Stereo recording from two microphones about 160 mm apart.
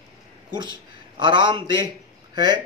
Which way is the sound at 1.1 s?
30° right (ahead or behind).